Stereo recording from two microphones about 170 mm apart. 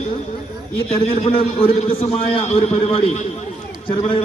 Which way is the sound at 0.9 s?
35° left (ahead or behind).